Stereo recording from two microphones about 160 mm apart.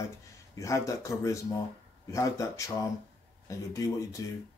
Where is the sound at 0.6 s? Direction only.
20° left (ahead or behind).